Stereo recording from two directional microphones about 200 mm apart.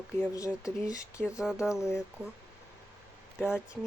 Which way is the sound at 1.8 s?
5° right (ahead or behind).